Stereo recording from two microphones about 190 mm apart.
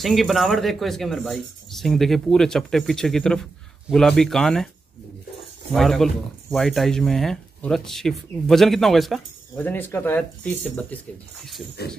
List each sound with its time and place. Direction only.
0.0 s speech: centre (ahead or behind)
5.7 s speech: centre (ahead or behind)
11.8 s a sound: 55° left (ahead or behind)